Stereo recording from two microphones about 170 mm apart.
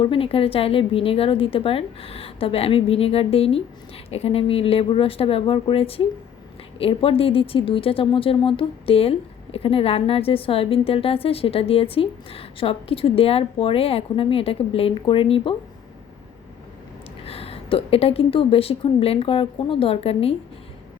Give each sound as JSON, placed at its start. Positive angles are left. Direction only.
{"t": 0.0, "sound": "speech", "side_deg": 35}
{"t": 17.2, "sound": "speech", "side_deg": 35}